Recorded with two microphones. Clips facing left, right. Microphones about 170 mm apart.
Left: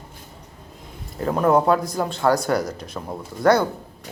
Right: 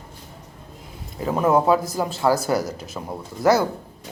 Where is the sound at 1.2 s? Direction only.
5° right (ahead or behind).